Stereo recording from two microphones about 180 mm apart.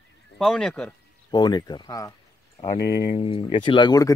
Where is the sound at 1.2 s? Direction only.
25° left (ahead or behind).